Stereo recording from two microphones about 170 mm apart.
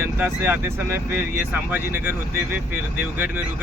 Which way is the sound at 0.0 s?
10° right (ahead or behind).